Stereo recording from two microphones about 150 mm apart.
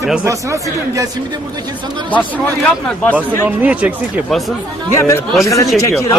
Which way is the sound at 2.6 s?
10° left (ahead or behind).